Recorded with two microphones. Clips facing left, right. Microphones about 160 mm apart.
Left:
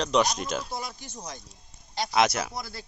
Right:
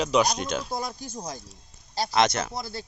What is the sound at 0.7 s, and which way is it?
Speech, 40° right (ahead or behind).